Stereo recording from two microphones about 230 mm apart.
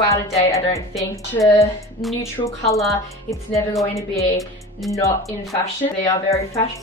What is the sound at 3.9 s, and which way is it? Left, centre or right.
Speech, centre.